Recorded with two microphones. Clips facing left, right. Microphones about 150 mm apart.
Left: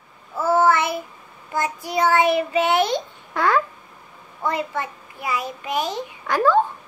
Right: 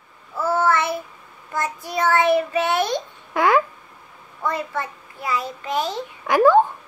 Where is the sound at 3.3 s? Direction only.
15° right (ahead or behind).